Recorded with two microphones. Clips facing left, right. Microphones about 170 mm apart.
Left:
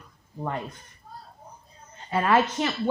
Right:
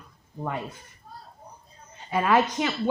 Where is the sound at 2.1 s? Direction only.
10° right (ahead or behind).